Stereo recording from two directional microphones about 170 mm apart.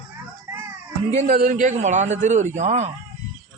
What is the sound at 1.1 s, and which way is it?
A man's voice, 45° right (ahead or behind).